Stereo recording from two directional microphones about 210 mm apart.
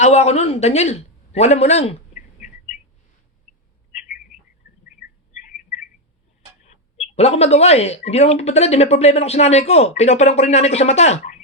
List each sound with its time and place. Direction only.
0.0 s speech: 30° left (ahead or behind)
4.9 s bird: 40° left (ahead or behind)
6.6 s a sound: 35° left (ahead or behind)
7.2 s speech: 30° left (ahead or behind)